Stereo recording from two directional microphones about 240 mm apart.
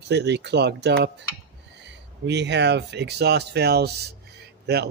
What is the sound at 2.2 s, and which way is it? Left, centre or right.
Speech, right.